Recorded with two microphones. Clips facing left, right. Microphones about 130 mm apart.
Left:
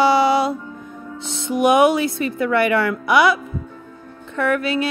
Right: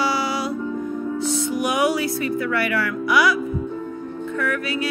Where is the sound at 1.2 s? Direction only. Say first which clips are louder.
Left 4 dB; 25° left (ahead or behind).